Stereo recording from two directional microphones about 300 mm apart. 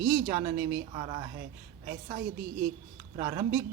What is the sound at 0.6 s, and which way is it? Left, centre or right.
Speech, right.